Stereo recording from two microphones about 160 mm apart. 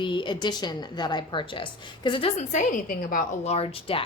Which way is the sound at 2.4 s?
50° left (ahead or behind).